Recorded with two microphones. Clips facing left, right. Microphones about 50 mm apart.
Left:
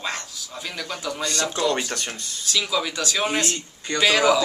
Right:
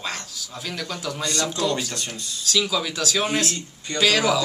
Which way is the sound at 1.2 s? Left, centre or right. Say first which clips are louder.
Even; left.